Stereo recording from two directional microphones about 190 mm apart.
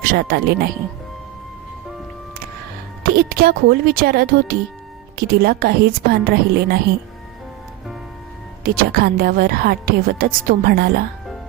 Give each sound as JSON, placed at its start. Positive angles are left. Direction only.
{"t": 0.0, "sound": "speech", "side_deg": -50}
{"t": 3.0, "sound": "a woman's voice", "side_deg": -50}
{"t": 8.6, "sound": "a woman's voice", "side_deg": -50}